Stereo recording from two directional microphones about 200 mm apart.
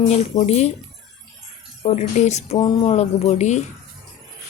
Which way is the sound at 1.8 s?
35° left (ahead or behind).